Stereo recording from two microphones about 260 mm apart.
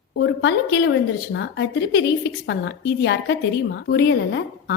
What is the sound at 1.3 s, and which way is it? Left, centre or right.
A woman's voice, left.